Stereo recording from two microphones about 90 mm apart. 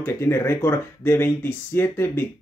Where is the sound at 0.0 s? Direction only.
30° left (ahead or behind).